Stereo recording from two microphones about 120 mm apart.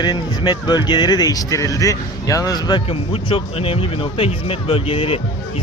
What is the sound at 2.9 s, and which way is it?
Speech, 50° left (ahead or behind).